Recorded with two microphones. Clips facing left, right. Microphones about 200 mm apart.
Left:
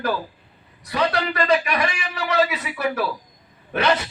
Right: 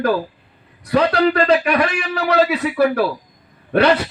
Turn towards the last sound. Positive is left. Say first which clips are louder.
# right 6 dB
turn(degrees=-55)  # may be behind; listen again after turning